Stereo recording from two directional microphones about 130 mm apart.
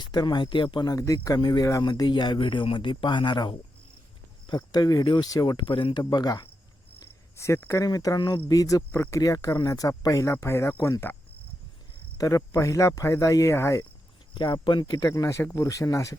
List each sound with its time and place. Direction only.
0.0 s speech: 35° left (ahead or behind)
0.9 s speech: 25° left (ahead or behind)
7.0 s speech: 20° left (ahead or behind)
12.1 s speech: 25° left (ahead or behind)
14.3 s speech: 35° left (ahead or behind)